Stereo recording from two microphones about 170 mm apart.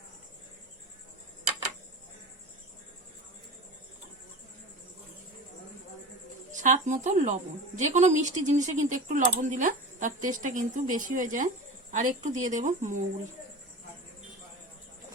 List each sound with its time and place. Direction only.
6.5 s speech: 45° right (ahead or behind)